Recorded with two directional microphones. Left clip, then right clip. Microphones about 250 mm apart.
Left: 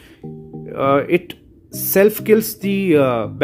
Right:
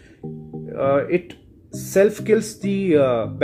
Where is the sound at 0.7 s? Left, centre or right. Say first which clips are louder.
Left 3 dB; left.